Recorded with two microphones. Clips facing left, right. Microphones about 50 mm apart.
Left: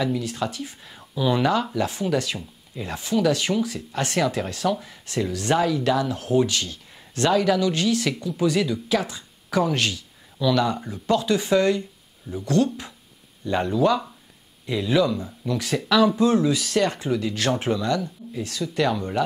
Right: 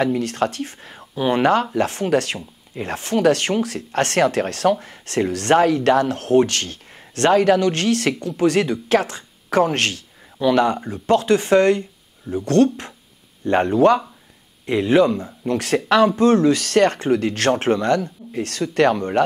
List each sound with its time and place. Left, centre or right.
0.0 s speech: right